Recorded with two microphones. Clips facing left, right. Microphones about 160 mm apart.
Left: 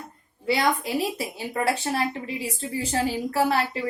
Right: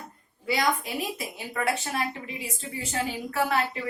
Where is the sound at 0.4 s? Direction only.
35° left (ahead or behind).